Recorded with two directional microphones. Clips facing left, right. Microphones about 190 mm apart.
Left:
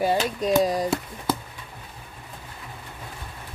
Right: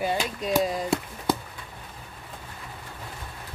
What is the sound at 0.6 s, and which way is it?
Speech, 35° left (ahead or behind).